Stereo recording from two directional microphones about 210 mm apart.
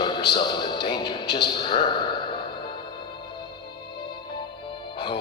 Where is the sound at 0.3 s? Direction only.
20° left (ahead or behind).